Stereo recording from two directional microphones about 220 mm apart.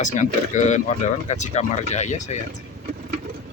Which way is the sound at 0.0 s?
35° left (ahead or behind).